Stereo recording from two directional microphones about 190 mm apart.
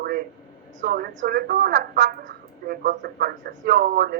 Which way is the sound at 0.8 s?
50° right (ahead or behind).